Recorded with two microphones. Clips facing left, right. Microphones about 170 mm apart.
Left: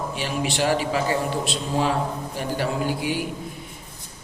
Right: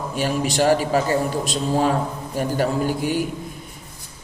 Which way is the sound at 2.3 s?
45° right (ahead or behind).